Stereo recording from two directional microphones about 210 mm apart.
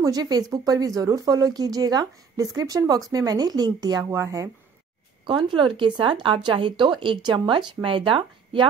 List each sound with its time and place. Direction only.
0.0 s speech: 20° right (ahead or behind)